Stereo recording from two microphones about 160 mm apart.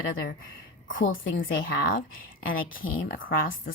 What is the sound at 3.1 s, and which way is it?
Speech, 65° left (ahead or behind).